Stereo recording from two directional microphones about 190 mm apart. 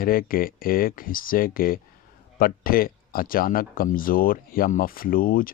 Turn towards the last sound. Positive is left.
turn(degrees=50)  # may be behind; listen again after turning